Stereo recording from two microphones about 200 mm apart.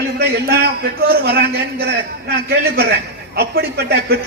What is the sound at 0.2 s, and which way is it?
A man's voice, 55° right (ahead or behind).